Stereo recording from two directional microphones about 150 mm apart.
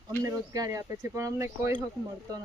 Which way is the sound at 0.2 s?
25° right (ahead or behind).